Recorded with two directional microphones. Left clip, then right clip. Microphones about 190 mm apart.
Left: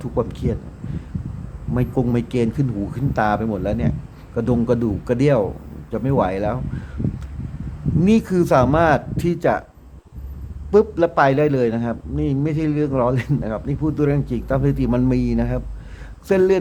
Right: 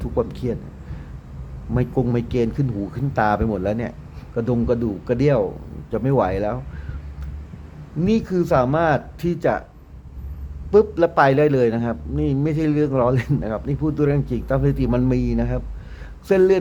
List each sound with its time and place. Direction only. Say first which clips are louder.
0.0 s speech: even; centre (ahead or behind)
1.7 s a man's voice: left 1 dB; centre (ahead or behind)
4.4 s a man's voice: left 1 dB; 5° left (ahead or behind)
8.0 s speech: left 2 dB; 10° left (ahead or behind)
10.7 s a man's voice: even; centre (ahead or behind)